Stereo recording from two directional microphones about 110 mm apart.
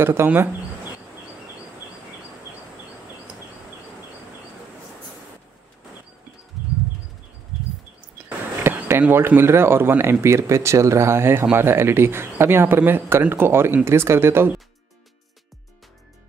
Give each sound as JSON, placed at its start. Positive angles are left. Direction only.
{"t": 0.0, "sound": "speech", "side_deg": -20}
{"t": 8.3, "sound": "speech", "side_deg": -15}